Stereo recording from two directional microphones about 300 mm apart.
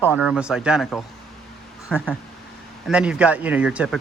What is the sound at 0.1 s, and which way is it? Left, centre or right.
Speech, centre.